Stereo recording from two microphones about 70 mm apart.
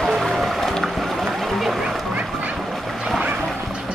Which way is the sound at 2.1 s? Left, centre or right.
Centre.